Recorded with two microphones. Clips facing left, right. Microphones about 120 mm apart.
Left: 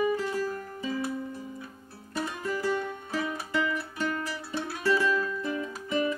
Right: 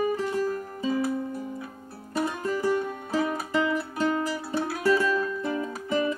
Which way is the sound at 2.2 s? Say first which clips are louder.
Right 4 dB; 30° right (ahead or behind).